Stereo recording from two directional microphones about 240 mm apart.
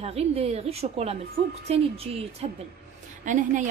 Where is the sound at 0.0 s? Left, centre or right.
Right.